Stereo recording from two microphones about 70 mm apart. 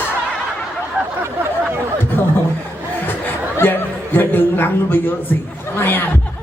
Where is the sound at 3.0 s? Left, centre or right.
Left.